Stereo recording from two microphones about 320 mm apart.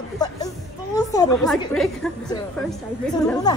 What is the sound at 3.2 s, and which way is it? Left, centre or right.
Speech, centre.